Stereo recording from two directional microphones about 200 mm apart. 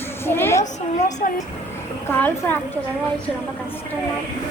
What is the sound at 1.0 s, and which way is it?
Speech, 35° left (ahead or behind).